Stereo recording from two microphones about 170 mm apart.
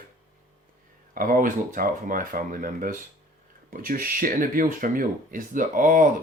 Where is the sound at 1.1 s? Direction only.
55° right (ahead or behind).